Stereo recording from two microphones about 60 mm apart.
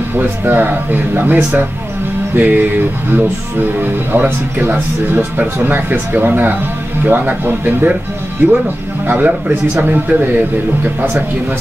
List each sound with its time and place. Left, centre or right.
0.1 s speech: right
3.8 s speech: right